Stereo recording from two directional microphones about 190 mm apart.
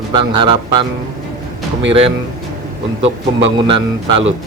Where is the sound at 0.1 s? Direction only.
25° right (ahead or behind).